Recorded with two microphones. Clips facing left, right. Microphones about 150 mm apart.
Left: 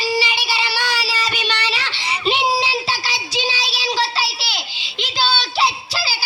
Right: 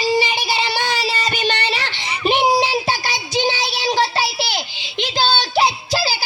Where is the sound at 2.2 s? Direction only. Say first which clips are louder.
Right 3 dB; 50° right (ahead or behind).